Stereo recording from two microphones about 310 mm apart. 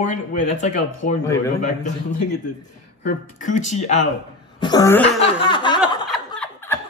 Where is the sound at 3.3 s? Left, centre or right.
Left.